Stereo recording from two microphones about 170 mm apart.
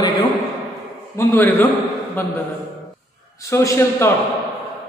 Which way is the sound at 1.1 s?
15° left (ahead or behind).